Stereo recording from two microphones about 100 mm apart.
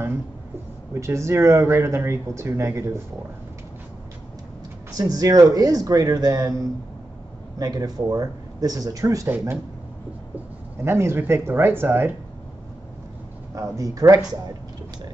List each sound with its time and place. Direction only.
0.9 s speech: 30° right (ahead or behind)
4.9 s speech: 40° right (ahead or behind)
10.8 s speech: 25° right (ahead or behind)
13.6 s speech: 35° right (ahead or behind)